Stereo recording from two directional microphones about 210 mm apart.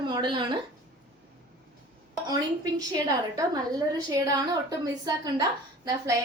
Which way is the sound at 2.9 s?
15° right (ahead or behind).